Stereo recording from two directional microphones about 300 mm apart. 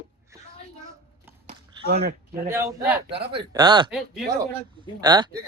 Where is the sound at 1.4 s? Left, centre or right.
Right.